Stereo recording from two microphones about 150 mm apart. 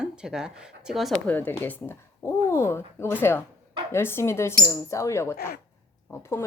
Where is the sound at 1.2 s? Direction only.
10° left (ahead or behind).